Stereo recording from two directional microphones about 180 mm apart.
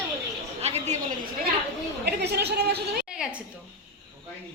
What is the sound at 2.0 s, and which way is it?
Speech, 65° right (ahead or behind).